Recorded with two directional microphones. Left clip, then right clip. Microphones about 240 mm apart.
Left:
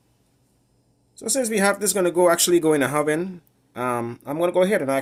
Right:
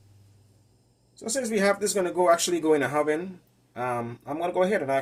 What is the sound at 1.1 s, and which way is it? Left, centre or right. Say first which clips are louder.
Speech: left 4 dB; left.